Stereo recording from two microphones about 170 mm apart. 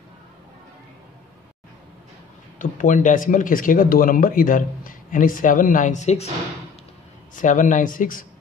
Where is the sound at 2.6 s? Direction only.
50° left (ahead or behind).